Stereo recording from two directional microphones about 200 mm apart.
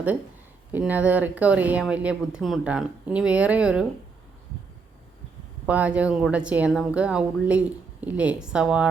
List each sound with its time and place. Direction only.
0.7 s speech: 10° right (ahead or behind)
5.6 s a woman's voice: 5° right (ahead or behind)